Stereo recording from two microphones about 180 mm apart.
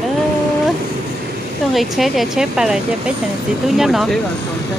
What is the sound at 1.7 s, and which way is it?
Speech, centre (ahead or behind).